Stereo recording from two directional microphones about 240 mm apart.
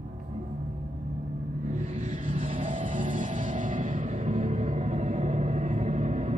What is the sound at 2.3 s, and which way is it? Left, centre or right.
Music, right.